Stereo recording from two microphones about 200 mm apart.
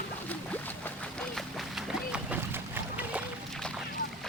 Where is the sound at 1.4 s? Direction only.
Centre (ahead or behind).